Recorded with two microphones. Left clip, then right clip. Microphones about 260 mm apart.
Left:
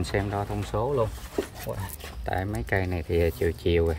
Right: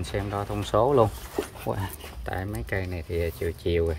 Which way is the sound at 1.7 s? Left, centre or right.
Right.